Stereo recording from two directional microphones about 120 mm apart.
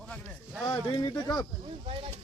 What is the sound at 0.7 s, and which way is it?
Speech, 30° left (ahead or behind).